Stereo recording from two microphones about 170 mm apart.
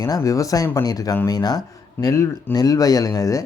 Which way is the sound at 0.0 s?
20° left (ahead or behind).